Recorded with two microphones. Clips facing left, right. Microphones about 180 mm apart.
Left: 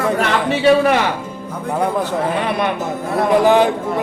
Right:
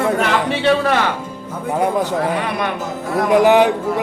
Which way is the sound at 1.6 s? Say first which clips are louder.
Right 1 dB; 10° right (ahead or behind).